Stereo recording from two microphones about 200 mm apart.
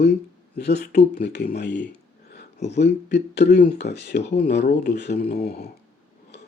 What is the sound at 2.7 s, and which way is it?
Speech, 60° left (ahead or behind).